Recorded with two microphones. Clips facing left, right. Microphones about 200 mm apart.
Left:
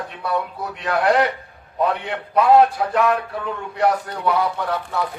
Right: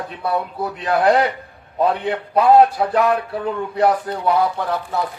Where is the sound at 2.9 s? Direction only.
35° right (ahead or behind).